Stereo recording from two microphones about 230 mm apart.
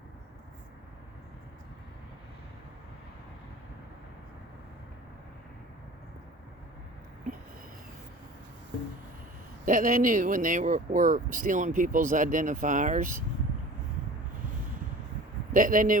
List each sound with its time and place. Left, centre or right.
9.6 s speech: right
15.5 s speech: right